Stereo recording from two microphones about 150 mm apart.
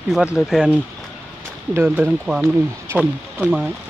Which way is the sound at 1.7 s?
10° right (ahead or behind).